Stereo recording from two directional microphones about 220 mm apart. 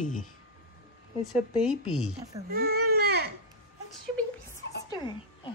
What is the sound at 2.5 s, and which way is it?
Baby cry, 45° right (ahead or behind).